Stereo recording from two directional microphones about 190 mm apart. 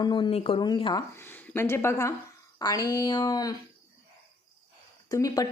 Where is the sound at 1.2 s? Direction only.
10° left (ahead or behind).